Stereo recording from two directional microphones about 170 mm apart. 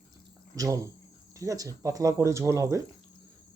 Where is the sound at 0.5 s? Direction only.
20° right (ahead or behind).